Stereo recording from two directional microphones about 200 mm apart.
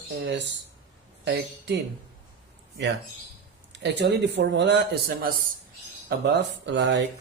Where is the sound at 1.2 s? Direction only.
60° right (ahead or behind).